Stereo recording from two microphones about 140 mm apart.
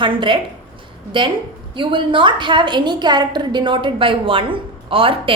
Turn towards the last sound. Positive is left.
turn(degrees=-40)  # may be behind; listen again after turning